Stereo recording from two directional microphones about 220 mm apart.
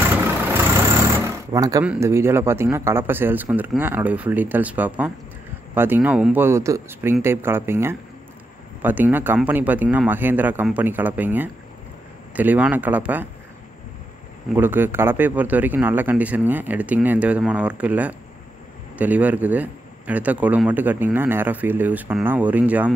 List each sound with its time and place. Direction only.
1.5 s speech: 15° right (ahead or behind)
14.5 s speech: 10° right (ahead or behind)